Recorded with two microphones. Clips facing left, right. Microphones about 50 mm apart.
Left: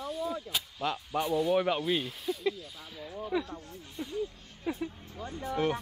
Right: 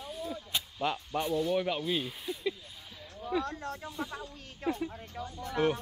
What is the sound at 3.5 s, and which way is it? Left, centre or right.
Speech, right.